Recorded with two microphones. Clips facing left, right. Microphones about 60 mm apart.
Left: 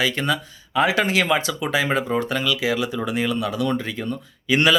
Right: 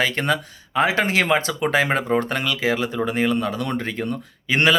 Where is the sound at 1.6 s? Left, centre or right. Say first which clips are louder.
Right 2 dB; right.